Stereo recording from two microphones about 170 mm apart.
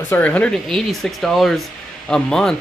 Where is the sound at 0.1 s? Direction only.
10° left (ahead or behind).